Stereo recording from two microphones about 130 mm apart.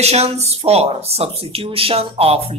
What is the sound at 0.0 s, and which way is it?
Speech, 55° right (ahead or behind).